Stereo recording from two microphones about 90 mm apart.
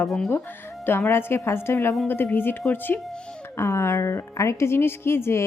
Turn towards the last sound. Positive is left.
turn(degrees=30)  # may be behind; listen again after turning